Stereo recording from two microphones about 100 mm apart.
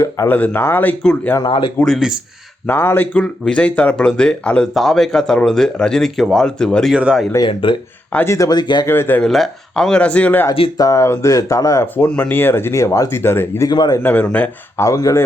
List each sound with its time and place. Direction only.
0.3 s speech: 15° left (ahead or behind)
1.5 s speech: 60° left (ahead or behind)
1.8 s speech: centre (ahead or behind)
2.6 s speech: 20° left (ahead or behind)
6.9 s speech: 10° right (ahead or behind)
7.3 s speech: 50° left (ahead or behind)
8.1 s speech: 25° left (ahead or behind)
8.4 s speech: 45° left (ahead or behind)
8.9 s speech: 20° left (ahead or behind)
9.2 s speech: 5° left (ahead or behind)
10.8 s speech: 30° left (ahead or behind)
13.7 s speech: 45° left (ahead or behind)
14.0 s speech: 20° left (ahead or behind)
14.8 s speech: 30° left (ahead or behind)